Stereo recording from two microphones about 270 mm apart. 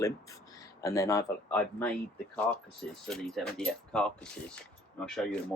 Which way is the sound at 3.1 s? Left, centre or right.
Centre.